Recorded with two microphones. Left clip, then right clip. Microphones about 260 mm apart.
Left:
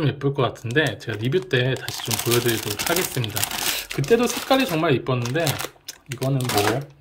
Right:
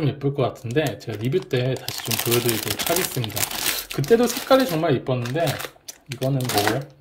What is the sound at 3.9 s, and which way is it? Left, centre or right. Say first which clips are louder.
Speech: right 1 dB; centre.